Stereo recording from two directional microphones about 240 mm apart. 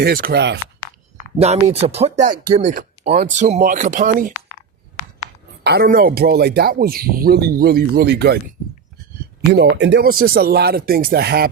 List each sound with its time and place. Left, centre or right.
0.0 s speech: right
1.4 s speech: right
5.6 s speech: right